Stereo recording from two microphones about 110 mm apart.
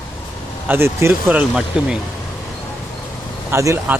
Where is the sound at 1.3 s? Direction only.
10° right (ahead or behind).